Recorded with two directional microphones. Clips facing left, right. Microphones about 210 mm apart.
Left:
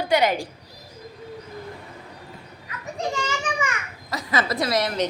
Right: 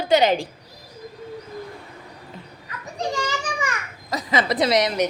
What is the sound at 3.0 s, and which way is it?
Children playing, 35° right (ahead or behind).